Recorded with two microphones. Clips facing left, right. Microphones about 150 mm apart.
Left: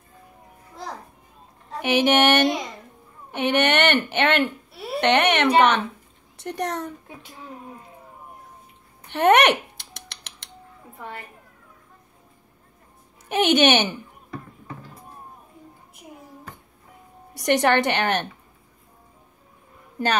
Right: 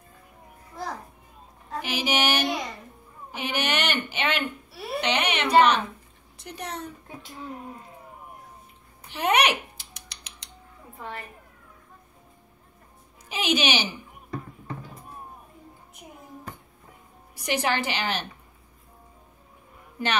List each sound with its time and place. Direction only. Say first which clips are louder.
1.8 s a woman's voice: left 8 dB; 60° left (ahead or behind)
9.1 s speech: left 6 dB; 70° left (ahead or behind)
13.3 s speech: left 7 dB; 70° left (ahead or behind)
17.5 s a woman's voice: left 7 dB; 70° left (ahead or behind)